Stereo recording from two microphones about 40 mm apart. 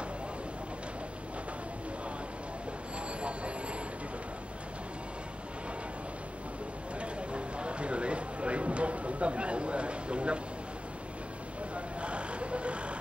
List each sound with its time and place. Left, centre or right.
3.2 s train: right
7.0 s a sound: right
11.7 s vehicle: right